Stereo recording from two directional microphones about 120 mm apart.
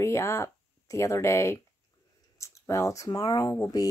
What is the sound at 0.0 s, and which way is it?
Speech, 25° left (ahead or behind).